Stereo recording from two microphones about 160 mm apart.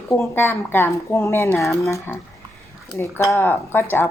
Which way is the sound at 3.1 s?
15° left (ahead or behind).